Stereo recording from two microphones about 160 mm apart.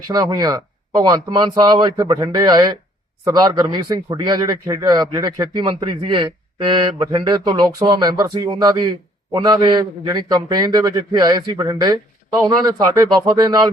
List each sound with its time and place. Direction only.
0.1 s a man's voice: 25° right (ahead or behind)